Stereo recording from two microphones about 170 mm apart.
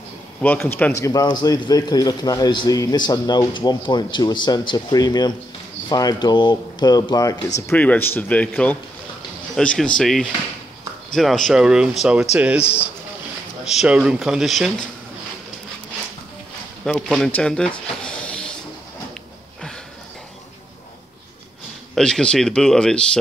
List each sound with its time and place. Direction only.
0.4 s a man's voice: 10° left (ahead or behind)
7.7 s speech: 10° left (ahead or behind); by 12.6 s 5° right (ahead or behind)
13.7 s speech: 5° right (ahead or behind)
16.8 s speech: centre (ahead or behind)
21.9 s speech: 5° left (ahead or behind)